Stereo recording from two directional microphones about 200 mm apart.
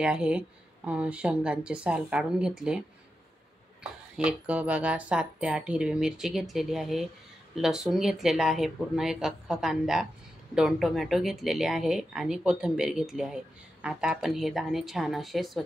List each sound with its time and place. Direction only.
0.0 s speech: 5° right (ahead or behind)
4.2 s speech: 5° right (ahead or behind)